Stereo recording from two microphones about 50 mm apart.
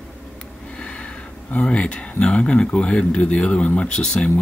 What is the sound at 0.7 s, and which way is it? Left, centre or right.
Speech, left.